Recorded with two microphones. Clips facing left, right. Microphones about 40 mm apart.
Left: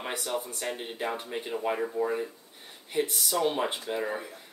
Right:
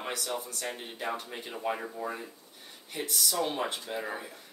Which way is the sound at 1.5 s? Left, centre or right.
Centre.